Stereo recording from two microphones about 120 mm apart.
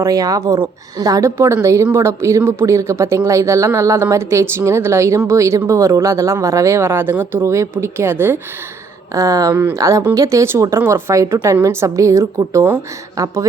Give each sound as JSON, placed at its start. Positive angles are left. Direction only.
{"t": 0.0, "sound": "a woman's voice", "side_deg": -30}